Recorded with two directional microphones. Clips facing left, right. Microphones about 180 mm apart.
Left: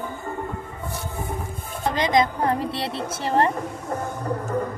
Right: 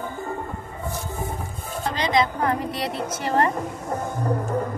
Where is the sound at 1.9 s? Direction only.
45° left (ahead or behind).